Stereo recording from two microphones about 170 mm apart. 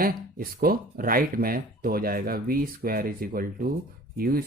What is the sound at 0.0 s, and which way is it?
Speech, 60° right (ahead or behind).